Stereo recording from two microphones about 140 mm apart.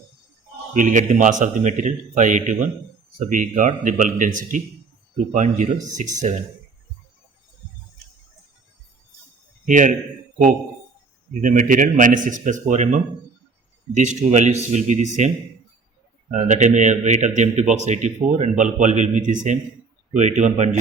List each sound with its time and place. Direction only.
0.7 s a man's voice: 65° right (ahead or behind)
9.6 s a man's voice: 65° right (ahead or behind)
11.3 s a man's voice: 70° right (ahead or behind)
16.3 s a man's voice: 55° right (ahead or behind)